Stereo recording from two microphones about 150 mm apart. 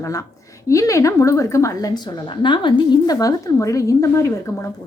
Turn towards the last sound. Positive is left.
turn(degrees=20)  # may be behind; listen again after turning